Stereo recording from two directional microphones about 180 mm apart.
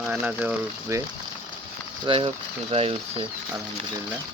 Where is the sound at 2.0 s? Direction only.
30° right (ahead or behind).